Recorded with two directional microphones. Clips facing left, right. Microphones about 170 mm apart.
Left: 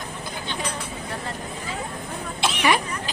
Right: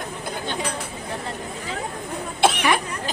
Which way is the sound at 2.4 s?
50° right (ahead or behind).